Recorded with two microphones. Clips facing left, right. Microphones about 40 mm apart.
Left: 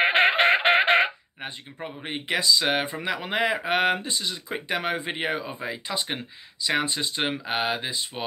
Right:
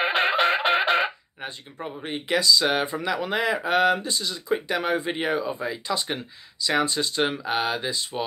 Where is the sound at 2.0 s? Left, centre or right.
Left.